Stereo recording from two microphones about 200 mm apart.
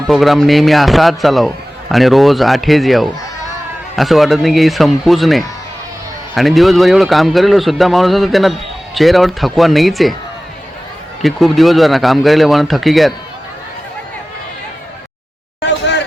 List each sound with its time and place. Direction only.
0.1 s a man's voice: centre (ahead or behind)
11.2 s a man's voice: centre (ahead or behind)
15.6 s a sound: 60° left (ahead or behind)